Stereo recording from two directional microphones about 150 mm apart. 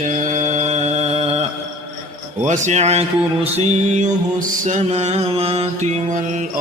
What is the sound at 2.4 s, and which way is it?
Speech, 50° right (ahead or behind).